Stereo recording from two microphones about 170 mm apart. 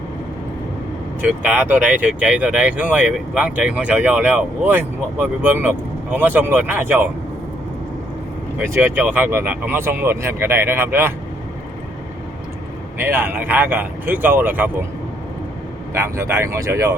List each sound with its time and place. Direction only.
1.2 s speech: 10° right (ahead or behind)
8.7 s speech: 10° right (ahead or behind)
13.0 s speech: 10° right (ahead or behind)
16.0 s speech: 15° right (ahead or behind)